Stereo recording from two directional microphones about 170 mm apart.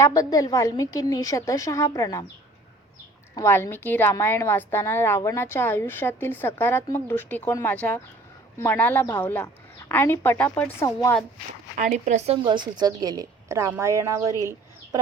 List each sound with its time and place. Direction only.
0.0 s a woman's voice: 20° left (ahead or behind)
3.3 s a woman's voice: 15° left (ahead or behind)
11.8 s a woman's voice: 45° right (ahead or behind); by 14.5 s 20° right (ahead or behind)